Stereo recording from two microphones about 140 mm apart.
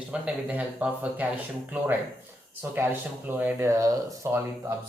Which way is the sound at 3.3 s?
15° right (ahead or behind).